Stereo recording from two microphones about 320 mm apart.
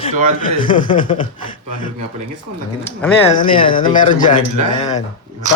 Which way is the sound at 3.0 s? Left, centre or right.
Centre.